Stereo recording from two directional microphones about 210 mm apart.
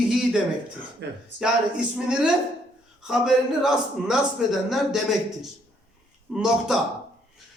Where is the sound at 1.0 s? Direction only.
55° right (ahead or behind).